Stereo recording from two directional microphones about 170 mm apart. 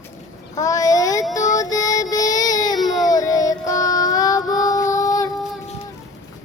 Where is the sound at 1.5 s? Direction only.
20° left (ahead or behind).